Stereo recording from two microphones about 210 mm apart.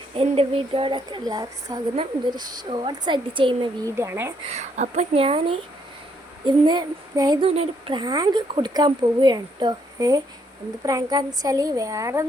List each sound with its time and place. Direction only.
0.1 s a woman's voice: 25° right (ahead or behind)
3.9 s a woman's voice: 10° right (ahead or behind)
4.4 s a woman's voice: 30° right (ahead or behind); by 12.2 s 15° right (ahead or behind)